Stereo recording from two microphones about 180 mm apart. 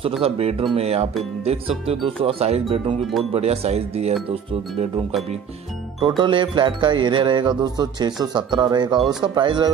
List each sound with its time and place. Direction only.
0.2 s speech: 35° right (ahead or behind)
5.9 s music: 25° right (ahead or behind)